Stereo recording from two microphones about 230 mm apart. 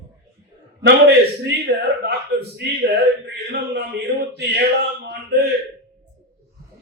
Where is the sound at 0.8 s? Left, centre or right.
Right.